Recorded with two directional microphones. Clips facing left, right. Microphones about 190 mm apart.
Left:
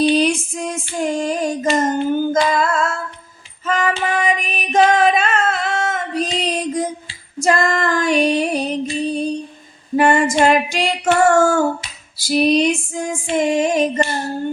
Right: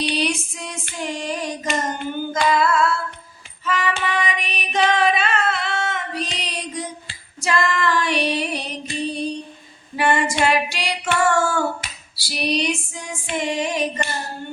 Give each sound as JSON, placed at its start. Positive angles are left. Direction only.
{"t": 0.1, "sound": "female singing", "side_deg": 45}
{"t": 3.7, "sound": "music", "side_deg": 45}
{"t": 7.4, "sound": "female singing", "side_deg": 45}
{"t": 9.9, "sound": "female singing", "side_deg": 45}